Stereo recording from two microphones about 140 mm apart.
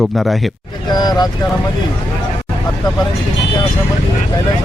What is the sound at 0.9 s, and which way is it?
Speech, 30° left (ahead or behind).